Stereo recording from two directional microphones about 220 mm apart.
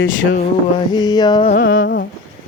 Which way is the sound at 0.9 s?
20° left (ahead or behind).